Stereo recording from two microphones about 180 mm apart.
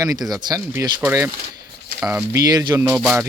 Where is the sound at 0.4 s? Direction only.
20° right (ahead or behind).